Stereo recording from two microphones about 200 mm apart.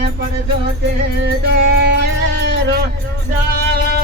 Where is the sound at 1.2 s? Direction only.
60° right (ahead or behind).